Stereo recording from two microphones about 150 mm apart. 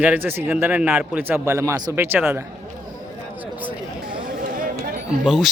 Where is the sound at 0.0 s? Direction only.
10° right (ahead or behind).